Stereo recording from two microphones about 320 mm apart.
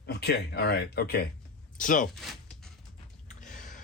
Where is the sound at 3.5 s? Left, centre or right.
Left.